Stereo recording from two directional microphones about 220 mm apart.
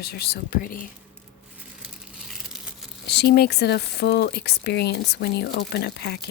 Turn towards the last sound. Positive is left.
turn(degrees=50)  # may be behind; listen again after turning